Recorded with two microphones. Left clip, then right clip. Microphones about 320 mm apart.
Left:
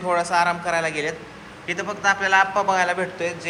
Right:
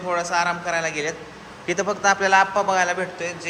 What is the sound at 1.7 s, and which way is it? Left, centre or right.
A man's voice, centre.